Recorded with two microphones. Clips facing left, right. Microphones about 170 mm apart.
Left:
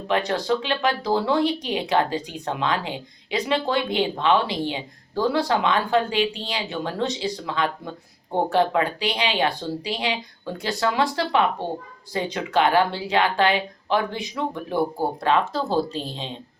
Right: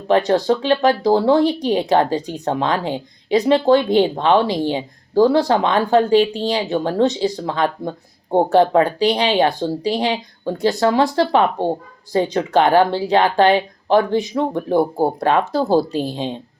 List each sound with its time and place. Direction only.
0.1 s speech: 40° right (ahead or behind)